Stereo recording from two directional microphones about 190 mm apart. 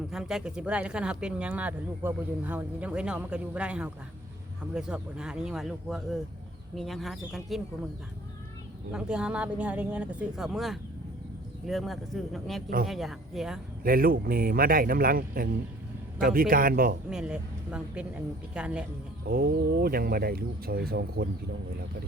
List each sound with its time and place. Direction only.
0.1 s speech: 5° right (ahead or behind)
8.9 s speech: 5° right (ahead or behind)
13.8 s speech: 50° right (ahead or behind)
17.1 s speech: 5° right (ahead or behind)
19.3 s speech: 50° right (ahead or behind)